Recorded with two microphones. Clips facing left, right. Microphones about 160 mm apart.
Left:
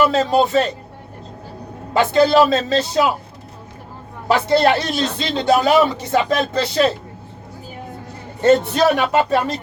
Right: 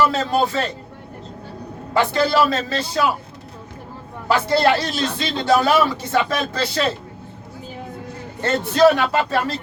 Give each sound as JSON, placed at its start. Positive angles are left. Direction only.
{"t": 0.0, "sound": "speech", "side_deg": 20}
{"t": 1.9, "sound": "speech", "side_deg": 20}
{"t": 4.3, "sound": "speech", "side_deg": 20}
{"t": 8.4, "sound": "speech", "side_deg": 15}